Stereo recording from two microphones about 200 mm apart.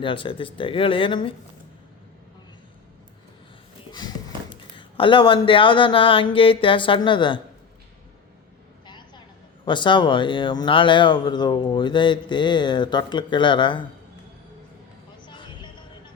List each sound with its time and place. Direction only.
0.0 s speech: 25° left (ahead or behind)
4.4 s speech: 25° left (ahead or behind)
8.9 s a sound: 20° left (ahead or behind)
9.6 s speech: 25° left (ahead or behind)
15.3 s vehicle: 25° left (ahead or behind)